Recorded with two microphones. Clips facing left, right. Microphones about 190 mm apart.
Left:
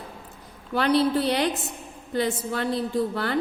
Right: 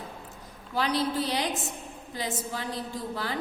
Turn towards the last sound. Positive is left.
turn(degrees=65)  # may be behind; listen again after turning